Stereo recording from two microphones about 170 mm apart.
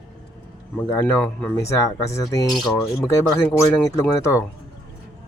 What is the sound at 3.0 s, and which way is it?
Speech, 15° left (ahead or behind).